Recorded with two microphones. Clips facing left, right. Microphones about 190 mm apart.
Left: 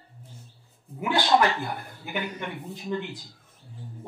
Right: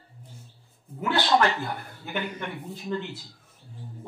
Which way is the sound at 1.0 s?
10° left (ahead or behind).